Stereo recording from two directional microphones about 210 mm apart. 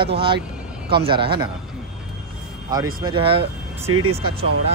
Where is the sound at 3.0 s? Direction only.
25° right (ahead or behind).